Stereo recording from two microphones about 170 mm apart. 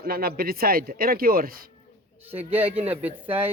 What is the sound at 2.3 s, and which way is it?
Speech, 10° right (ahead or behind).